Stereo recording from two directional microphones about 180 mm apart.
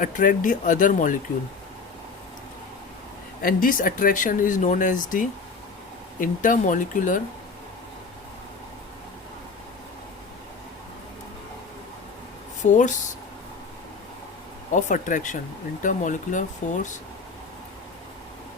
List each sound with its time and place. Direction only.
0.0 s speech: 45° left (ahead or behind)
3.4 s speech: 50° left (ahead or behind)
12.6 s speech: 40° left (ahead or behind)
14.7 s speech: 45° left (ahead or behind)